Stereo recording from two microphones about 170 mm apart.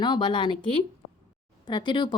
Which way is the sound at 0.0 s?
25° left (ahead or behind).